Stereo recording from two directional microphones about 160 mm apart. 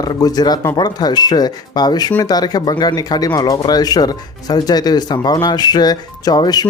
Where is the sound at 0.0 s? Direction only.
25° left (ahead or behind).